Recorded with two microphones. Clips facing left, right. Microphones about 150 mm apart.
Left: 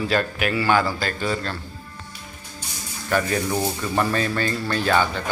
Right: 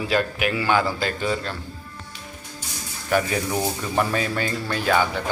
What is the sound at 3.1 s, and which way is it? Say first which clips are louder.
A man's voice: even; 10° right (ahead or behind).